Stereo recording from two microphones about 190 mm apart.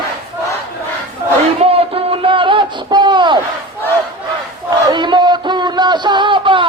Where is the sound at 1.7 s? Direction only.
30° right (ahead or behind).